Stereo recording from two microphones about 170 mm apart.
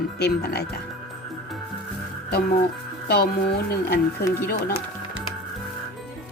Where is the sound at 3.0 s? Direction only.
70° left (ahead or behind).